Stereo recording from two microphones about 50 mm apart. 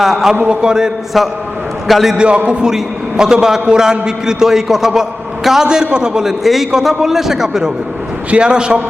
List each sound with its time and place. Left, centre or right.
0.0 s a man's voice: centre
1.9 s a man's voice: centre
2.1 s a man's voice: right
6.4 s a man's voice: centre